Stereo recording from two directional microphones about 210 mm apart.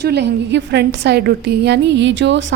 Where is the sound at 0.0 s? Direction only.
50° right (ahead or behind).